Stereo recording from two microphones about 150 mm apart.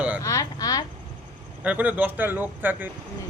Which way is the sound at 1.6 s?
10° right (ahead or behind).